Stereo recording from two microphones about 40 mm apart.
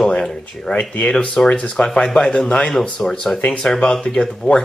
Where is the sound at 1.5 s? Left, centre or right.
Left.